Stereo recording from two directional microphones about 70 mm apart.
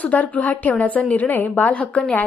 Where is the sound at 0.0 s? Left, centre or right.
Left.